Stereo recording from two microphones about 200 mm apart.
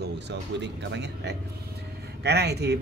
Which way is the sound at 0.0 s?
60° right (ahead or behind).